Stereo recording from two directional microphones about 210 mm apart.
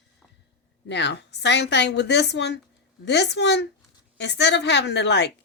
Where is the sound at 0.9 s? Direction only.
55° left (ahead or behind).